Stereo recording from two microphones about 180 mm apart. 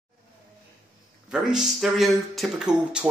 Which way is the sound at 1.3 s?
5° right (ahead or behind).